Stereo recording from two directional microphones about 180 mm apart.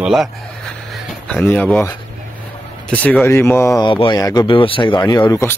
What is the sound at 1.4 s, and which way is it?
Speech, 10° left (ahead or behind).